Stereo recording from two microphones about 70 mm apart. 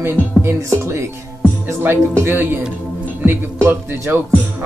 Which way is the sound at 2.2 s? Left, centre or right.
Right.